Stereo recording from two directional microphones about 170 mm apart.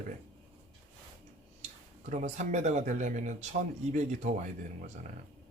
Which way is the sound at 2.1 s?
45° right (ahead or behind).